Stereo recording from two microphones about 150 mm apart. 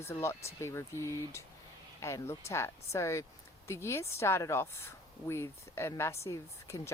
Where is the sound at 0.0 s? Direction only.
15° left (ahead or behind).